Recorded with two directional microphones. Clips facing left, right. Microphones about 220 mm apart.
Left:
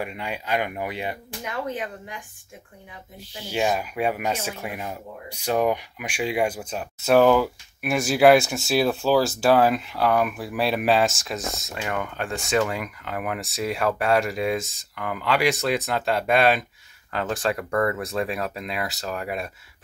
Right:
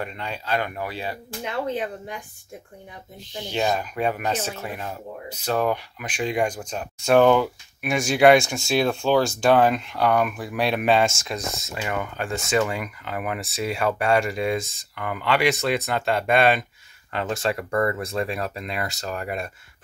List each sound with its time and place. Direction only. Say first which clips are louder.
0.0 s speech: left 1 dB; 10° left (ahead or behind)
1.4 s speech: right 3 dB; 30° right (ahead or behind)
3.2 s speech: even; 10° left (ahead or behind)